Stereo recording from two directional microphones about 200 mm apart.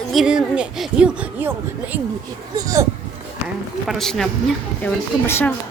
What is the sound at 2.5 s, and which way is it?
Speech, 15° right (ahead or behind).